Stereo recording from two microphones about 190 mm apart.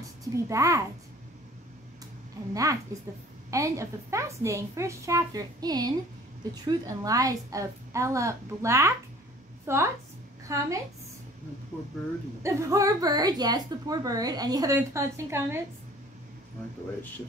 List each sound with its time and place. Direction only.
0.2 s a woman's voice: 15° right (ahead or behind)
2.5 s a woman's voice: 15° right (ahead or behind)
12.4 s a woman's voice: 15° right (ahead or behind)